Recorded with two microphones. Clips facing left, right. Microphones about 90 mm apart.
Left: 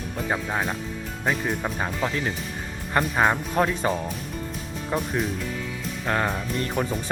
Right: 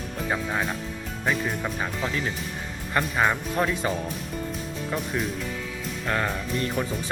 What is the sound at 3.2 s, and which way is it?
Speech, 35° left (ahead or behind).